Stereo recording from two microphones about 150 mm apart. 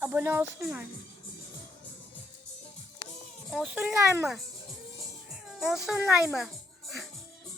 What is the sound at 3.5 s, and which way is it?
Speech, 5° right (ahead or behind).